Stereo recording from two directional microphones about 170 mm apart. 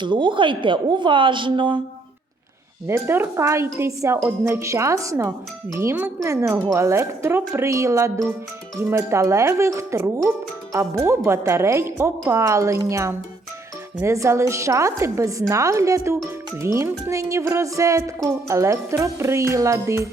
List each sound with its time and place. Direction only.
0.0 s a woman's voice: 25° right (ahead or behind)
2.8 s speech: 15° right (ahead or behind)